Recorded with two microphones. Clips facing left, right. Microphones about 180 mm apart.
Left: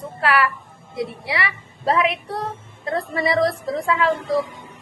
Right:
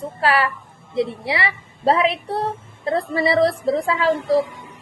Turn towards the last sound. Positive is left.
turn(degrees=-25)  # may be behind; listen again after turning